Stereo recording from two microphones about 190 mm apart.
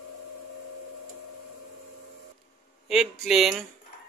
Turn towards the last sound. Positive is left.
turn(degrees=0)  # may be behind; listen again after turning